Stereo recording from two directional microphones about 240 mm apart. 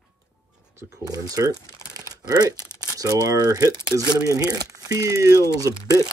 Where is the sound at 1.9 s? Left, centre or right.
Centre.